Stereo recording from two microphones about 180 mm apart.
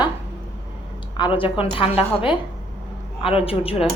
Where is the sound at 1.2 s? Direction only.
30° left (ahead or behind).